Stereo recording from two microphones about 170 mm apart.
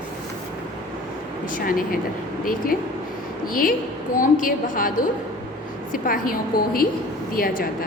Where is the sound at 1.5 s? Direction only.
55° left (ahead or behind).